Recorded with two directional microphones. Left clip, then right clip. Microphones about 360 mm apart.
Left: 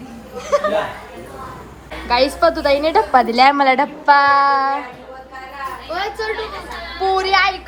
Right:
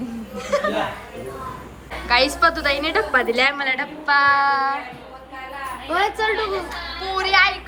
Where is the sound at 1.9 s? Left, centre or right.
Centre.